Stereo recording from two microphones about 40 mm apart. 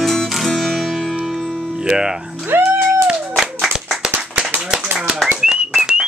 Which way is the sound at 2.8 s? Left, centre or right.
Right.